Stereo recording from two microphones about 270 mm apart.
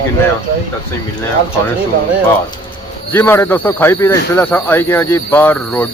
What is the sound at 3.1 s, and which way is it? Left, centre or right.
Speech, centre.